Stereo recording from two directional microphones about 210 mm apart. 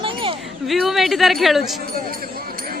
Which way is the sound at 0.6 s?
Centre (ahead or behind).